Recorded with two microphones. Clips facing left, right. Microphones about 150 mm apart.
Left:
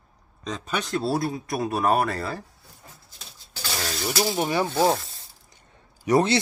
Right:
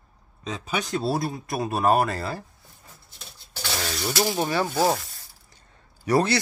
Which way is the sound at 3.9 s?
Centre (ahead or behind).